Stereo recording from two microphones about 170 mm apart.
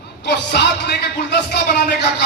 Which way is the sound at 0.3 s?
90° left.